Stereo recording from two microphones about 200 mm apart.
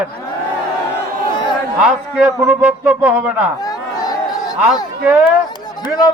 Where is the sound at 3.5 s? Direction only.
20° left (ahead or behind).